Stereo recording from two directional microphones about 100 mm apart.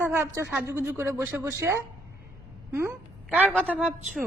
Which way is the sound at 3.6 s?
15° right (ahead or behind).